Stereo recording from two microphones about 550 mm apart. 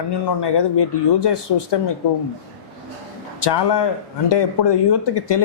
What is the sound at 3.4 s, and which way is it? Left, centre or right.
Speech, left.